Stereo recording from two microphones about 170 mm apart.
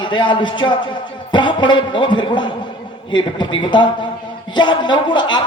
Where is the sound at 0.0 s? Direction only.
30° left (ahead or behind).